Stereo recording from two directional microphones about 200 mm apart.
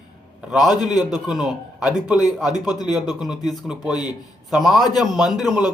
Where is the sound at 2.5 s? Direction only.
20° left (ahead or behind).